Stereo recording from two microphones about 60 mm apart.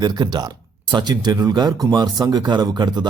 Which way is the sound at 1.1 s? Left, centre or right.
Right.